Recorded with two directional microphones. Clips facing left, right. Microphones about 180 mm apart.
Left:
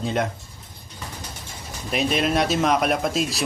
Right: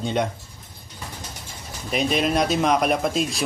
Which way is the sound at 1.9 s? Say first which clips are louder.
Even; centre (ahead or behind).